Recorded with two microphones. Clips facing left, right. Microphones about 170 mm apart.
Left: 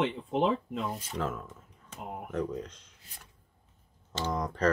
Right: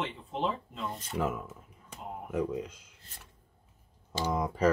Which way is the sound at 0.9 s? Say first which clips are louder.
Even; 5° left (ahead or behind).